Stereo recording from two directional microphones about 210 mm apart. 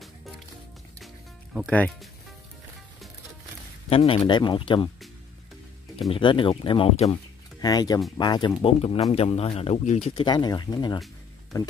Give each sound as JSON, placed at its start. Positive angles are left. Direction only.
{"t": 0.9, "sound": "music", "side_deg": 0}
{"t": 3.9, "sound": "speech", "side_deg": 25}
{"t": 5.9, "sound": "speech", "side_deg": 25}